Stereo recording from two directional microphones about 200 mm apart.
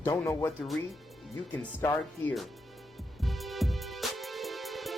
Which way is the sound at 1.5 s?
10° left (ahead or behind).